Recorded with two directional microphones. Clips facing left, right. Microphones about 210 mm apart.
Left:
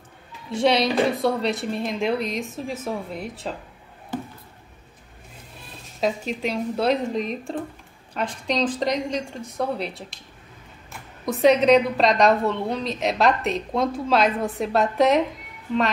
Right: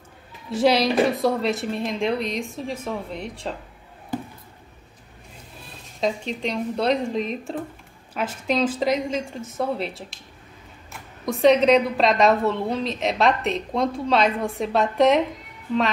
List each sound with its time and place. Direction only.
0.5 s a woman's voice: centre (ahead or behind)
5.9 s a woman's voice: 5° left (ahead or behind)